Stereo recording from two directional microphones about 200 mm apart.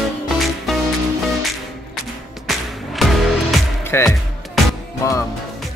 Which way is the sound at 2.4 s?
Centre (ahead or behind).